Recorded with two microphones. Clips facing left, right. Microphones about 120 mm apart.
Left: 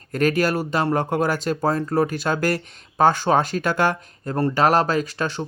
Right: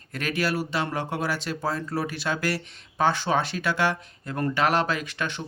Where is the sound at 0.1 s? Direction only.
45° left (ahead or behind).